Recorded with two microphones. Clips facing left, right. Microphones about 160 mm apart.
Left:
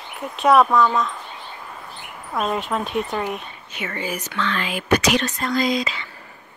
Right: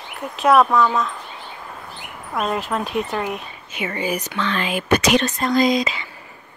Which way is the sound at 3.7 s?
15° right (ahead or behind).